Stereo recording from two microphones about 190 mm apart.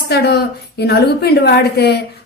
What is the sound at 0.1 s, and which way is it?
A woman's voice, 60° left (ahead or behind).